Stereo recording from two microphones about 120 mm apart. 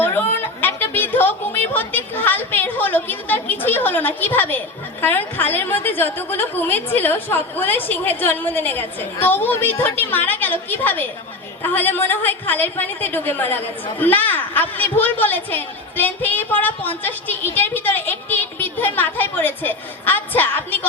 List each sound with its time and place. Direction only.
0.0 s a woman's voice: 15° left (ahead or behind)